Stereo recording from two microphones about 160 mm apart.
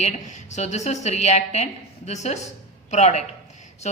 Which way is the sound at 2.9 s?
45° left (ahead or behind).